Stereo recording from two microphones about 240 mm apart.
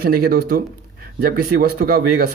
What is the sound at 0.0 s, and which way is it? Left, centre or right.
Speech, right.